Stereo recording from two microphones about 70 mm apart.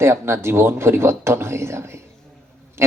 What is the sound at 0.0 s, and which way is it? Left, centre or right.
A man's voice, right.